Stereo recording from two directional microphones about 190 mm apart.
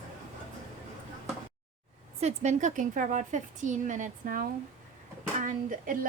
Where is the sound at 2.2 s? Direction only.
35° right (ahead or behind).